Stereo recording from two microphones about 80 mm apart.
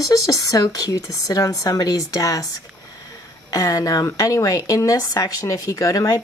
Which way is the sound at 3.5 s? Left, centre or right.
Left.